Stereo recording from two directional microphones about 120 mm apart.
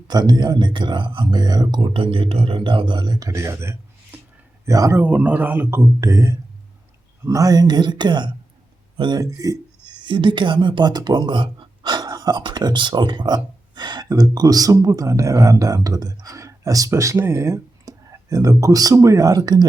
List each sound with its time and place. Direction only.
0.1 s speech: 35° right (ahead or behind)
5.0 s speech: 10° right (ahead or behind); by 19.6 s 30° right (ahead or behind)